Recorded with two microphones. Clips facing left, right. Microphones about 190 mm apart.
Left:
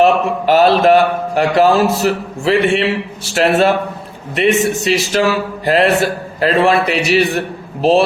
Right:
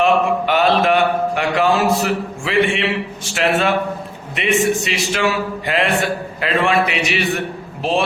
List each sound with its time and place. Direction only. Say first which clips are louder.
0.0 s a man's voice: left 3 dB; 35° left (ahead or behind)